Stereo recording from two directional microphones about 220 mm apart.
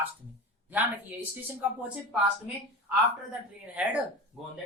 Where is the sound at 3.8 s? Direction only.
5° right (ahead or behind).